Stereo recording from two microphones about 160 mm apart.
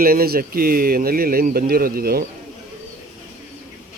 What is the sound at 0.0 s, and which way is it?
Speech, 70° right (ahead or behind).